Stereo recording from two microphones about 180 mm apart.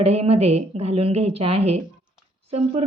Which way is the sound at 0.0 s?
35° right (ahead or behind).